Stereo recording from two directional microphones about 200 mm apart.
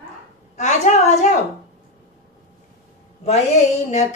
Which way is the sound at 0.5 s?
35° left (ahead or behind).